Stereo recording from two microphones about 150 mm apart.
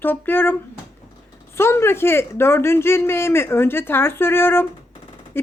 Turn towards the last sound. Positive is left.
turn(degrees=15)  # may be behind; listen again after turning